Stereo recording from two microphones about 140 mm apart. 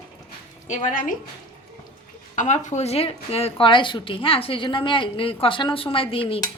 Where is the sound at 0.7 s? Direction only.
65° left (ahead or behind).